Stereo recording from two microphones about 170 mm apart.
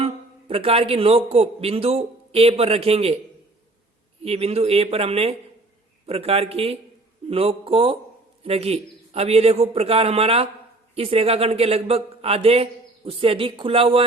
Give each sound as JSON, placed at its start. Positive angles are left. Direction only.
{"t": 0.0, "sound": "a man's voice", "side_deg": -35}
{"t": 4.2, "sound": "a man's voice", "side_deg": -35}